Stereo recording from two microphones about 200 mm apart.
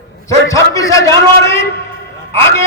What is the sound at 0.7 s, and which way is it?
Speech, 15° left (ahead or behind).